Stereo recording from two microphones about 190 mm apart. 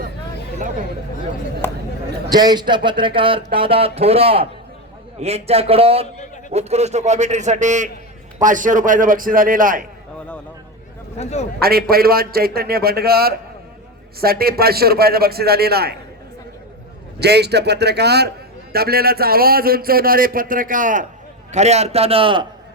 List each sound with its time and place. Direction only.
1.6 s speech: 10° left (ahead or behind)
2.3 s a man's voice: 20° right (ahead or behind); by 9.8 s 45° right (ahead or behind)
11.2 s a man's voice: 35° left (ahead or behind)
11.6 s speech: 55° right (ahead or behind)
17.2 s a man's voice: 60° right (ahead or behind); by 22.4 s 25° right (ahead or behind)